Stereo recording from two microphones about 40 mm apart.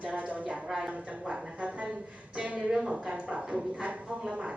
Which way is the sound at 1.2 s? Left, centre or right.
Right.